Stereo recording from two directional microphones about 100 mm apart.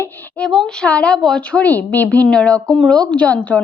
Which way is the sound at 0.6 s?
10° left (ahead or behind).